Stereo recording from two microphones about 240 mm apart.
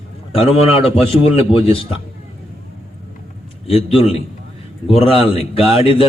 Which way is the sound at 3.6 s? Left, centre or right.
Left.